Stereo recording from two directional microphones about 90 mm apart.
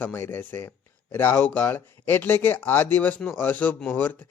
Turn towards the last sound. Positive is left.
turn(degrees=20)  # may be behind; listen again after turning